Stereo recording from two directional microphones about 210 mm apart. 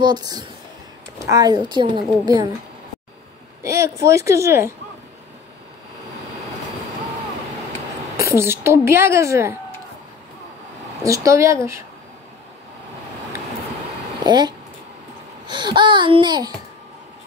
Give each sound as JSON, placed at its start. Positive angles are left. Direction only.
{"t": 0.0, "sound": "a woman's voice", "side_deg": -20}
{"t": 3.6, "sound": "a woman's voice", "side_deg": -15}
{"t": 8.2, "sound": "a woman's voice", "side_deg": -10}
{"t": 11.1, "sound": "a woman's voice", "side_deg": -15}
{"t": 14.2, "sound": "a woman's voice", "side_deg": -20}